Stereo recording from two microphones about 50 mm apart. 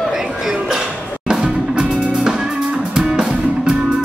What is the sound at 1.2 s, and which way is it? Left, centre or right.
Music, centre.